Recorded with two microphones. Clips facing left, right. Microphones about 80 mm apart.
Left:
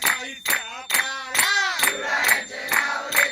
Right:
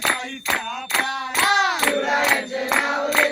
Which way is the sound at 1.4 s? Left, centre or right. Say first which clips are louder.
Right 4 dB; right.